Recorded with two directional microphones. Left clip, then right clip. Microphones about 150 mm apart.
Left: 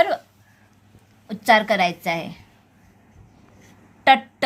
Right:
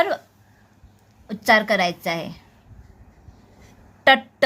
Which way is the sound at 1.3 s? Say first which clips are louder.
Left 1 dB; 15° right (ahead or behind).